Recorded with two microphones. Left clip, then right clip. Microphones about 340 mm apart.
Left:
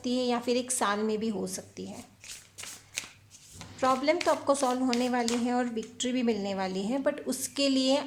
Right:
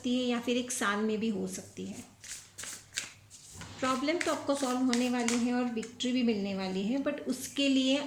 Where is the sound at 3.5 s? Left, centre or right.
Centre.